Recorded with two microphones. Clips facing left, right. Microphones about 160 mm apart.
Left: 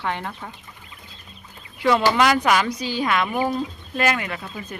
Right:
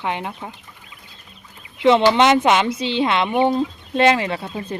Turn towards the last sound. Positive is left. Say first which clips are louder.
# right 6 dB
turn(degrees=-30)  # may be behind; listen again after turning